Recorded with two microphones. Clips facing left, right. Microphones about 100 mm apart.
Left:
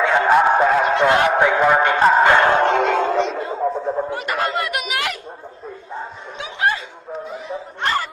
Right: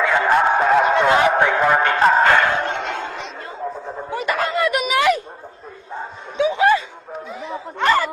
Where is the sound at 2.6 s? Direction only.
90° left.